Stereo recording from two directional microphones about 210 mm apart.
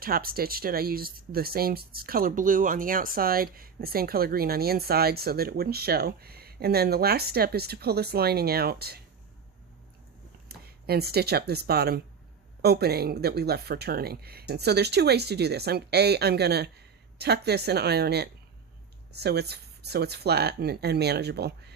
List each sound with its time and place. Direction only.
0.0 s speech: 45° right (ahead or behind)
10.5 s speech: 50° right (ahead or behind)